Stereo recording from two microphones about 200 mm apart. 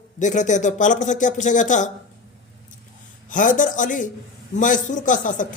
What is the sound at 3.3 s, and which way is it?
A man's voice, 40° left (ahead or behind).